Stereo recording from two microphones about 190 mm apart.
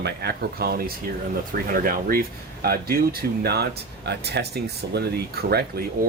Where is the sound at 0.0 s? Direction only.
60° right (ahead or behind).